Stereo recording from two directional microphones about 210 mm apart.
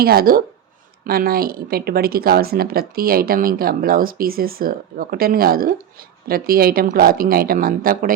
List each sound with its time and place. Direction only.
0.0 s speech: 45° right (ahead or behind)